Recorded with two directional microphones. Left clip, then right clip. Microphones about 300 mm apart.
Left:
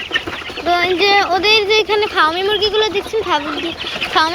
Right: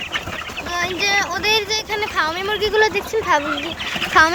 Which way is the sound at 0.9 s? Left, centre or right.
Centre.